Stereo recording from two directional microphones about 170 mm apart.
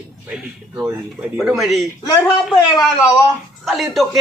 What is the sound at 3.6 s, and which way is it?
Speech, centre (ahead or behind).